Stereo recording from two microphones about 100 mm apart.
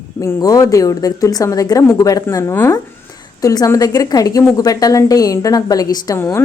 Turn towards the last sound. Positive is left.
turn(degrees=40)  # may be behind; listen again after turning